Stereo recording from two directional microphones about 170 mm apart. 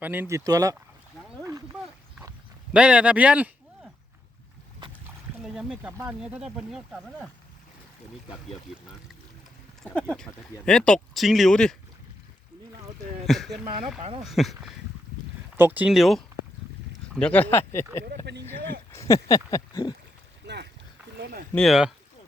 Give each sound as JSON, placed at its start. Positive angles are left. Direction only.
{"t": 0.0, "sound": "speech", "side_deg": -10}
{"t": 2.7, "sound": "speech", "side_deg": -5}
{"t": 5.4, "sound": "speech", "side_deg": -5}
{"t": 9.8, "sound": "speech", "side_deg": 5}
{"t": 13.2, "sound": "speech", "side_deg": 0}
{"t": 18.0, "sound": "speech", "side_deg": -75}
{"t": 18.4, "sound": "speech", "side_deg": 15}
{"t": 20.4, "sound": "boat", "side_deg": -90}
{"t": 21.5, "sound": "speech", "side_deg": 0}